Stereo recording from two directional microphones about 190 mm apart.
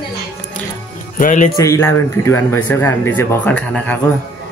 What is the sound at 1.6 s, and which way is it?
Speech, 15° left (ahead or behind).